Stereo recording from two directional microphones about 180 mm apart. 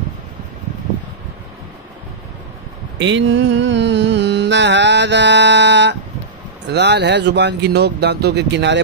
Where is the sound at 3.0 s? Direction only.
85° right.